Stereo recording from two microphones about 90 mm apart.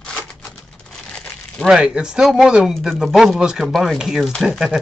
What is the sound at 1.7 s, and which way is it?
Speech, 10° right (ahead or behind).